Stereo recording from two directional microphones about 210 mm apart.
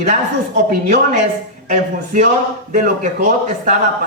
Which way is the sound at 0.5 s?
40° right (ahead or behind).